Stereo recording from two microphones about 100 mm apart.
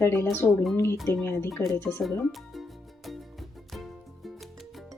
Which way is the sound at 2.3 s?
Centre (ahead or behind).